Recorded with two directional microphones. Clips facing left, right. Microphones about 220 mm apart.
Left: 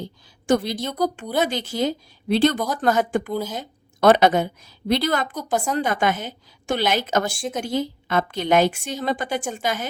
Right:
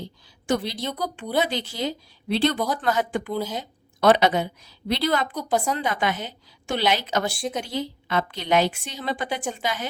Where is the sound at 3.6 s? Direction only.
45° left (ahead or behind).